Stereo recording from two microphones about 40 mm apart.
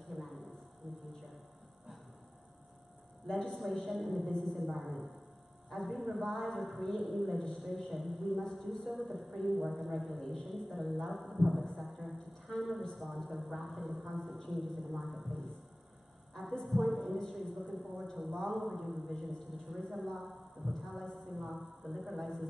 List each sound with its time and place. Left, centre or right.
0.1 s a sound: centre
3.3 s a man's voice: centre
16.6 s a woman's voice: centre